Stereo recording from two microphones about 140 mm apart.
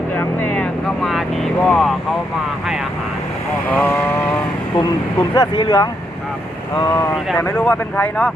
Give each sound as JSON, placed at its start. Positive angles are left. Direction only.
{"t": 0.1, "sound": "vehicle", "side_deg": 15}
{"t": 3.7, "sound": "vehicle", "side_deg": 15}
{"t": 5.3, "sound": "speech", "side_deg": 30}
{"t": 7.3, "sound": "speech", "side_deg": 15}